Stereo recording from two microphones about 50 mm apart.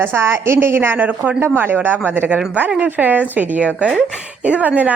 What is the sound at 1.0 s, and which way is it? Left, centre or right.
A woman's voice, right.